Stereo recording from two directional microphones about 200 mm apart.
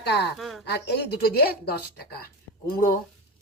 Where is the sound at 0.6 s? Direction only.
55° left (ahead or behind).